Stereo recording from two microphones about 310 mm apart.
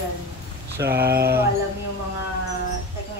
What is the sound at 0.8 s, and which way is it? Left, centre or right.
Speech, right.